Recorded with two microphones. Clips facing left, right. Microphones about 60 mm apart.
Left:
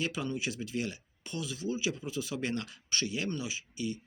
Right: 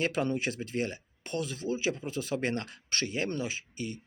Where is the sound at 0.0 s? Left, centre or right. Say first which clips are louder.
Right 5 dB; right.